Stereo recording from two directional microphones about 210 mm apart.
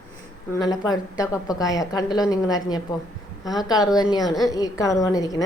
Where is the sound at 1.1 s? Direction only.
15° left (ahead or behind).